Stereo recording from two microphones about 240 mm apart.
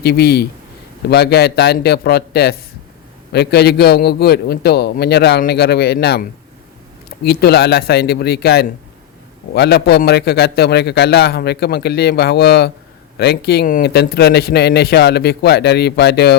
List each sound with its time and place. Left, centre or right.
0.0 s a man's voice: left
7.3 s a man's voice: left